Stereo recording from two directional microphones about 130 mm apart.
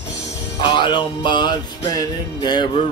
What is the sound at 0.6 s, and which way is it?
Music, 40° left (ahead or behind).